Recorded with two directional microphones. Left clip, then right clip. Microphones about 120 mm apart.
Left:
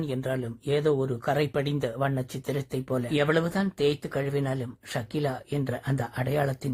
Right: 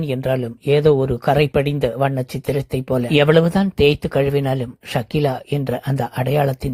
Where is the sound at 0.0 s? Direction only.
40° right (ahead or behind).